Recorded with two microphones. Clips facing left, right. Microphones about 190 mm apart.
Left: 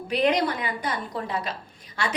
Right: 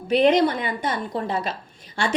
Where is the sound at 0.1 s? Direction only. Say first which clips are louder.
Right 6 dB; 25° right (ahead or behind).